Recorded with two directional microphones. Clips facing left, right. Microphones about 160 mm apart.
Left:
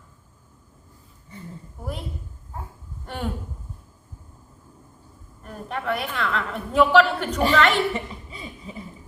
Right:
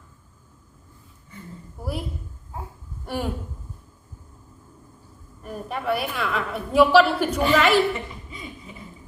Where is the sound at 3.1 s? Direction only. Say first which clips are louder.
Right 5 dB; 10° right (ahead or behind).